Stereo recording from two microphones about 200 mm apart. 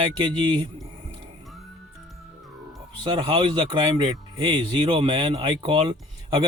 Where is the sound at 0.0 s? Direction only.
25° right (ahead or behind).